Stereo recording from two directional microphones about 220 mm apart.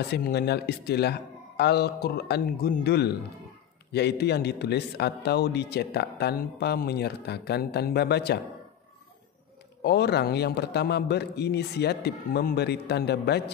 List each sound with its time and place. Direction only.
0.1 s a man's voice: 50° left (ahead or behind)
9.8 s a man's voice: 50° left (ahead or behind)